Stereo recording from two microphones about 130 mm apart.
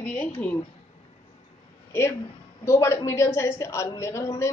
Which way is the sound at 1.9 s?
20° left (ahead or behind).